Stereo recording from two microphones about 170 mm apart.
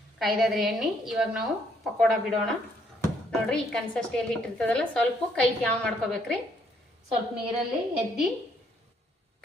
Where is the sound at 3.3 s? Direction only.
5° left (ahead or behind).